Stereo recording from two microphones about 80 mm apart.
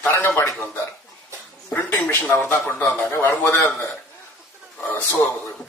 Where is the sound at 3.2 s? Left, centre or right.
Left.